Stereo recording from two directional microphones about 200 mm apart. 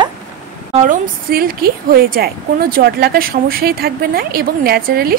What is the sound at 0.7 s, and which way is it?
A woman's voice, 40° right (ahead or behind).